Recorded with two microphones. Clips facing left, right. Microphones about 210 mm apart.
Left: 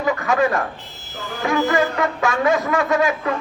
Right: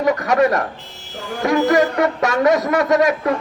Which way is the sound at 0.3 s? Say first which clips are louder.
Right 3 dB; 40° right (ahead or behind).